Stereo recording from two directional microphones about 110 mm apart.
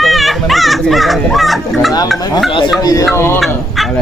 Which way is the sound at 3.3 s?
Centre (ahead or behind).